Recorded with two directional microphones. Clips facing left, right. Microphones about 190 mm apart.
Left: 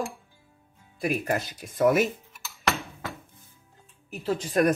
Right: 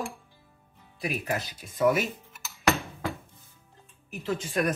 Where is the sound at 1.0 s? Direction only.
50° left (ahead or behind).